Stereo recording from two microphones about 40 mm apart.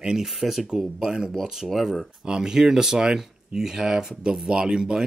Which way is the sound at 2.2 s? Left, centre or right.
Centre.